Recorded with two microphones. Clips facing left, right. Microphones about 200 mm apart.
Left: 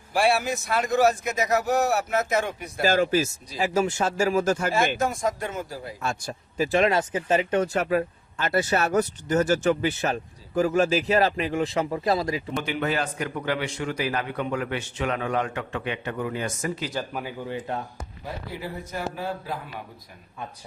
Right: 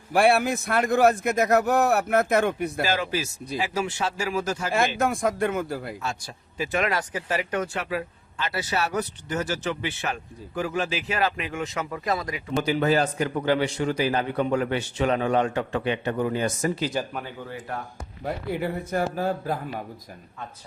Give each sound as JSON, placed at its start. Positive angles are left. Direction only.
{"t": 0.1, "sound": "a man's voice", "side_deg": -60}
{"t": 2.8, "sound": "speech", "side_deg": 45}
{"t": 4.9, "sound": "a man's voice", "side_deg": -55}
{"t": 6.0, "sound": "speech", "side_deg": 50}
{"t": 6.7, "sound": "speech", "side_deg": 30}
{"t": 7.7, "sound": "speech", "side_deg": 45}
{"t": 12.6, "sound": "a man's voice", "side_deg": -35}
{"t": 17.1, "sound": "speech", "side_deg": 5}
{"t": 17.5, "sound": "speech", "side_deg": 25}
{"t": 18.2, "sound": "speech", "side_deg": -60}